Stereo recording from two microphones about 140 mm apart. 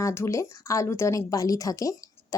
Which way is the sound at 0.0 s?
20° left (ahead or behind).